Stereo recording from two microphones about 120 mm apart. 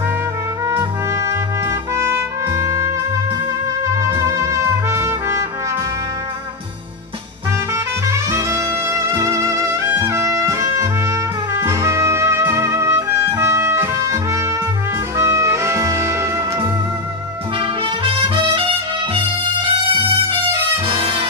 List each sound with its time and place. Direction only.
0.7 s trumpet: 25° right (ahead or behind)
2.0 s music: 25° right (ahead or behind)
4.2 s music: 25° right (ahead or behind)
7.7 s music: 25° right (ahead or behind)
17.6 s music: 45° right (ahead or behind)
20.8 s music: 40° right (ahead or behind)